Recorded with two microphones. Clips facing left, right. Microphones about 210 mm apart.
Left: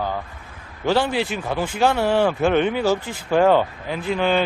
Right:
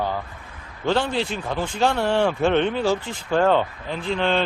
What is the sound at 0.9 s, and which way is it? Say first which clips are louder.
Speech: left 2 dB; 5° left (ahead or behind).